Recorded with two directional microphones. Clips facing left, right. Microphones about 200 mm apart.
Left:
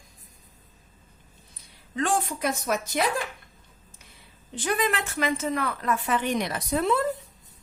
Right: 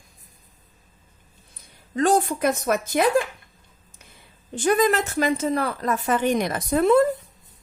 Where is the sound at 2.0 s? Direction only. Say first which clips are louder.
Right 6 dB; 40° right (ahead or behind).